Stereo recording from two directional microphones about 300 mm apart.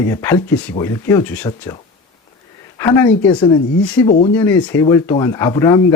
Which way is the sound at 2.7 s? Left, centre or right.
Centre.